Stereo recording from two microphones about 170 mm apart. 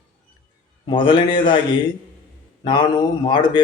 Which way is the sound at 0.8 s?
30° left (ahead or behind).